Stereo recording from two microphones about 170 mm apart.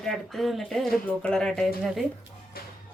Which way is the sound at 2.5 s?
65° left (ahead or behind).